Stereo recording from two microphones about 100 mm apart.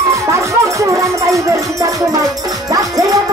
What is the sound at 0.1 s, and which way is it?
Music, 30° right (ahead or behind).